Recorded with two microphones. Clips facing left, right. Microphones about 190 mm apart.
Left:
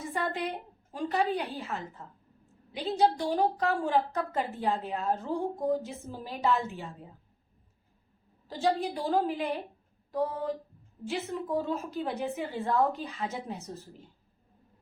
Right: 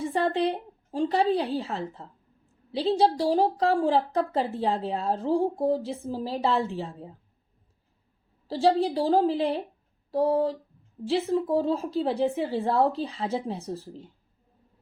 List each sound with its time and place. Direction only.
0.0 s a woman's voice: 30° right (ahead or behind)
8.4 s a woman's voice: 35° right (ahead or behind)